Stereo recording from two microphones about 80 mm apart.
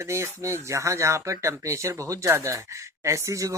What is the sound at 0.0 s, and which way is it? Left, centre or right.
Speech, right.